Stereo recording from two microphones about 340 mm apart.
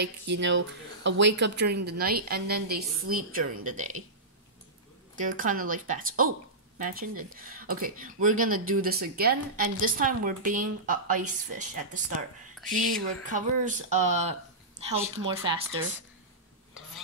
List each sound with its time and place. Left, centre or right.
0.0 s a woman's voice: right
5.1 s a woman's voice: right
12.5 s speech: centre
13.2 s a woman's voice: right